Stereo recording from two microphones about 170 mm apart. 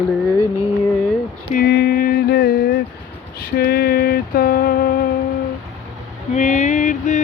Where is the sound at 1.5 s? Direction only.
65° left (ahead or behind).